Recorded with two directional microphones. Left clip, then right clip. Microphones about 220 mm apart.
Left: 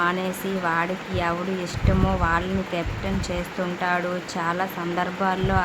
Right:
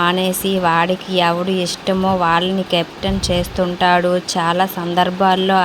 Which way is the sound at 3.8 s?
25° right (ahead or behind).